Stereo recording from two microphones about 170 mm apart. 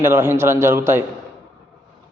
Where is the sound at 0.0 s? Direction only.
15° right (ahead or behind).